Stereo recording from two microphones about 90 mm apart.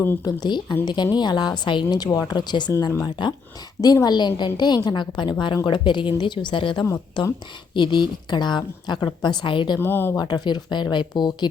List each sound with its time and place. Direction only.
0.3 s a woman's voice: 50° left (ahead or behind)
3.8 s a woman's voice: 45° left (ahead or behind); by 9.7 s 60° left (ahead or behind)
9.8 s speech: 25° left (ahead or behind)
10.2 s a woman's voice: 50° left (ahead or behind)